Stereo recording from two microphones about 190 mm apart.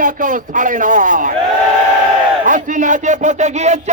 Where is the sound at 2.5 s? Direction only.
40° right (ahead or behind).